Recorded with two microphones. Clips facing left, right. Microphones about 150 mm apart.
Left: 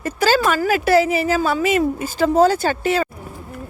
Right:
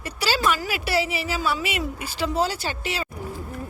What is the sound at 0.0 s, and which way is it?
A woman's voice, 45° left (ahead or behind).